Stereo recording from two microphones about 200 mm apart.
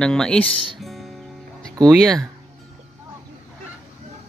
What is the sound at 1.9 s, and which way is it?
Speech, centre (ahead or behind).